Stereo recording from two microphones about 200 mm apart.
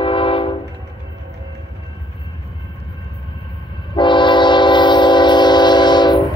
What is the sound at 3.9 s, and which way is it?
Train, 25° left (ahead or behind).